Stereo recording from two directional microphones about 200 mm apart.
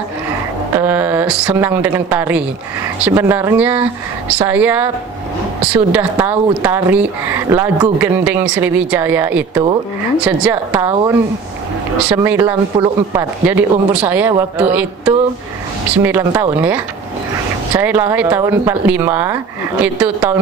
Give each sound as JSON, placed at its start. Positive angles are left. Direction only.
{"t": 0.7, "sound": "speech", "side_deg": -10}
{"t": 5.9, "sound": "speech", "side_deg": -10}
{"t": 10.9, "sound": "speech", "side_deg": -25}
{"t": 12.1, "sound": "speech", "side_deg": -10}